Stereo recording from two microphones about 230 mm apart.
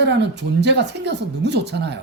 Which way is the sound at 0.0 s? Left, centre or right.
Right.